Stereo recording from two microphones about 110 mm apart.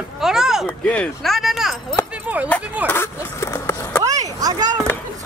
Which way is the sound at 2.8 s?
25° left (ahead or behind).